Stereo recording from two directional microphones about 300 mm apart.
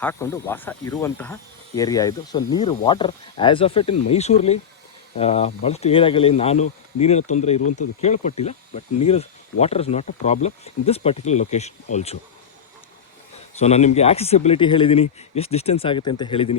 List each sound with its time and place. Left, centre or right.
0.0 s speech: centre
13.6 s speech: left